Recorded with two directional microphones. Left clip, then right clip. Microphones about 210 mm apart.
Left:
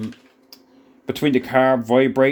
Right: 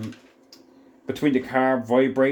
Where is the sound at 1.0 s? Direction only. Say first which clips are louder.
Left 3 dB; 50° left (ahead or behind).